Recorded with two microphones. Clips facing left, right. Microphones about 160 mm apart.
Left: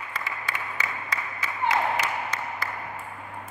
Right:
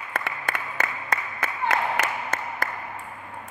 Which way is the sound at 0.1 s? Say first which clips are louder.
Right 5 dB; 55° right (ahead or behind).